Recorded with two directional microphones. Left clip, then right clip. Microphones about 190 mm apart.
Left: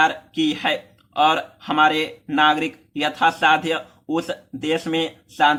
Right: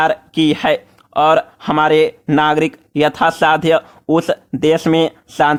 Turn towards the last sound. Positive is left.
turn(degrees=-50)  # may be behind; listen again after turning